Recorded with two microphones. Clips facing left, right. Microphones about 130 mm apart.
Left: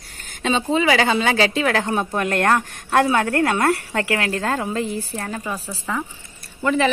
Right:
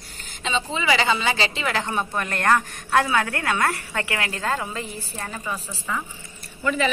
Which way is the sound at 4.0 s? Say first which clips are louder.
Left 6 dB; 50° left (ahead or behind).